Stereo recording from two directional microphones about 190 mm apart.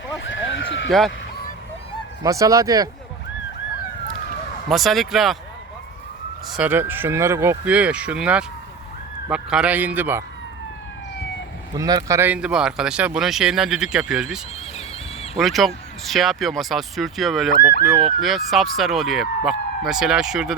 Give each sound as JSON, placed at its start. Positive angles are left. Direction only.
{"t": 0.2, "sound": "a sound", "side_deg": 80}
{"t": 0.9, "sound": "speech", "side_deg": 0}
{"t": 2.2, "sound": "speech", "side_deg": -15}
{"t": 4.7, "sound": "speech", "side_deg": 0}
{"t": 6.5, "sound": "speech", "side_deg": -10}
{"t": 11.8, "sound": "speech", "side_deg": -20}